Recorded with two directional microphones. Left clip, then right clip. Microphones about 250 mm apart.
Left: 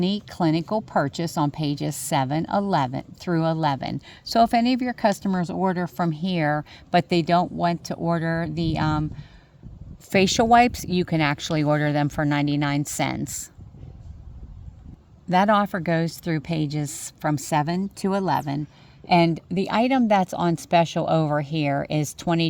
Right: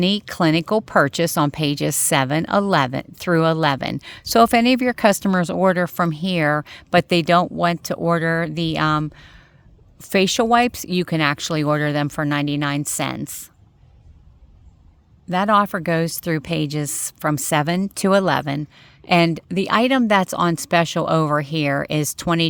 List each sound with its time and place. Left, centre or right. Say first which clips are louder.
0.0 s speech: right 5 dB; right
10.0 s speech: right 2 dB; centre
15.3 s speech: right 2 dB; centre